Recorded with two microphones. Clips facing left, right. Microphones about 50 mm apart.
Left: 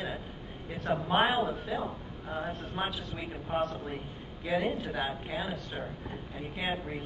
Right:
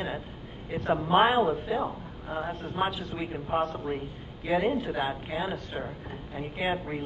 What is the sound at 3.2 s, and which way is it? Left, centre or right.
Speech, centre.